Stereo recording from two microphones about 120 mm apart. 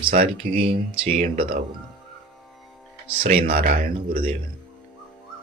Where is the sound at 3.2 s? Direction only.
60° right (ahead or behind).